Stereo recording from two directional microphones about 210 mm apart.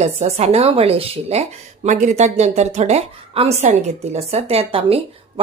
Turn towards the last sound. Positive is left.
turn(degrees=-30)  # may be behind; listen again after turning